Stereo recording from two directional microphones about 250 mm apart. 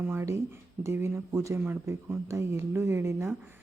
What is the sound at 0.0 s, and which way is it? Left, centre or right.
Speech, centre.